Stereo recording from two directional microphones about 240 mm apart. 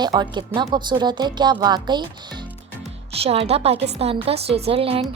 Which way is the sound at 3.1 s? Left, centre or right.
Right.